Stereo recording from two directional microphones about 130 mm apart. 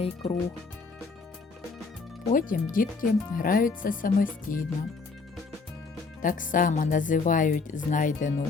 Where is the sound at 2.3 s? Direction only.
90° left.